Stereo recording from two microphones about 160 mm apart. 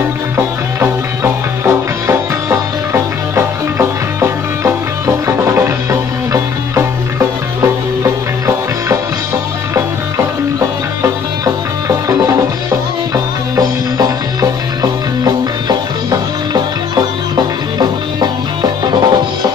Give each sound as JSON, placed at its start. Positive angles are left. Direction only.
{"t": 0.4, "sound": "music", "side_deg": -15}
{"t": 11.0, "sound": "music", "side_deg": -20}